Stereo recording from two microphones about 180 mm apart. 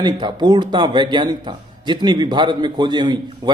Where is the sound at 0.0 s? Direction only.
25° right (ahead or behind).